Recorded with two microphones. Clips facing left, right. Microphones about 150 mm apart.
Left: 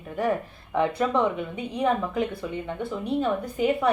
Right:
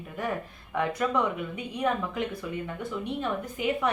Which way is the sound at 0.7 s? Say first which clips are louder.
Left 4 dB; 30° left (ahead or behind).